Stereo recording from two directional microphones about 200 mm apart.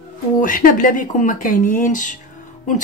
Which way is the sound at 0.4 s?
40° left (ahead or behind).